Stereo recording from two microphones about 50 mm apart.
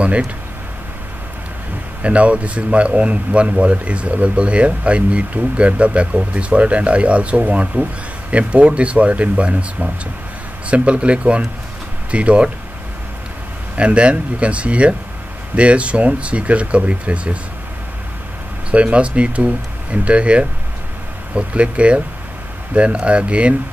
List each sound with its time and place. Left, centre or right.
0.0 s speech: right
2.0 s speech: right
13.7 s speech: right
18.7 s speech: right